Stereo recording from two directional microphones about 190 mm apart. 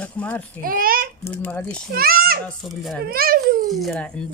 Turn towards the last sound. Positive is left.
turn(degrees=0)  # may be behind; listen again after turning